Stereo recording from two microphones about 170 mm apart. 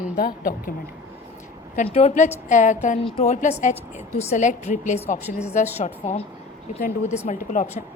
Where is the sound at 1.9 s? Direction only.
40° left (ahead or behind).